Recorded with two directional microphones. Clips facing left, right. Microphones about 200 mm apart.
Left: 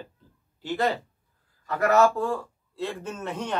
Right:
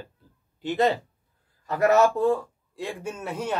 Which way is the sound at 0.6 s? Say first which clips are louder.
Right 3 dB; 20° right (ahead or behind).